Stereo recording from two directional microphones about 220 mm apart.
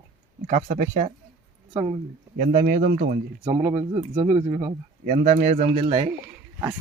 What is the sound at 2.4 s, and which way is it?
Speech, 35° right (ahead or behind).